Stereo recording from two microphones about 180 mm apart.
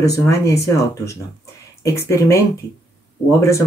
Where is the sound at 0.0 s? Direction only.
15° left (ahead or behind).